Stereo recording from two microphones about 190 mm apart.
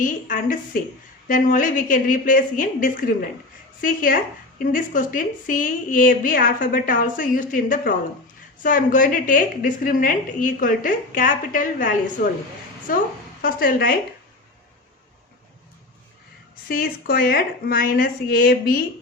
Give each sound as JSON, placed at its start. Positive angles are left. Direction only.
{"t": 0.0, "sound": "a woman's voice", "side_deg": 45}
{"t": 16.6, "sound": "a woman's voice", "side_deg": 50}